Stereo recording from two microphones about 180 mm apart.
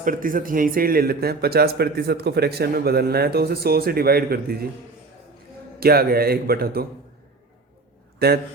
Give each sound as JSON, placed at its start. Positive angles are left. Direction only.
{"t": 0.0, "sound": "a man's voice", "side_deg": -50}
{"t": 5.8, "sound": "a man's voice", "side_deg": -60}
{"t": 8.2, "sound": "a man's voice", "side_deg": -60}